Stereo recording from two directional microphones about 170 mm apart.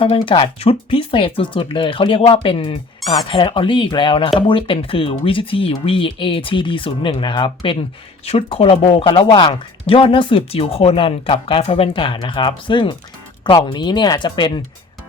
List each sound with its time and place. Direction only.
0.0 s speech: 30° left (ahead or behind)